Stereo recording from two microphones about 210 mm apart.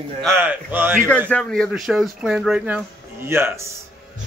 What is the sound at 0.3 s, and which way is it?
Speech, 10° right (ahead or behind).